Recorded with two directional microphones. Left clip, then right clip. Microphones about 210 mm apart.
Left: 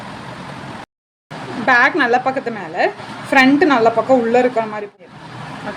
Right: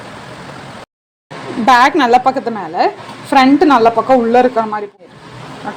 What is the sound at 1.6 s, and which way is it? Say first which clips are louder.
A woman's voice: right 4 dB; 25° right (ahead or behind).